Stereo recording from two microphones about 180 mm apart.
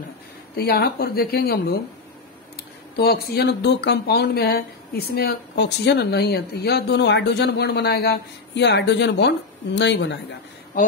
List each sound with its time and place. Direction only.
0.6 s speech: 60° left (ahead or behind)
3.0 s speech: 60° left (ahead or behind)